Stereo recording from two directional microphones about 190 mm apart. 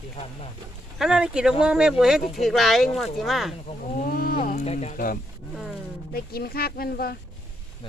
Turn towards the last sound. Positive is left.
turn(degrees=55)  # may be behind; listen again after turning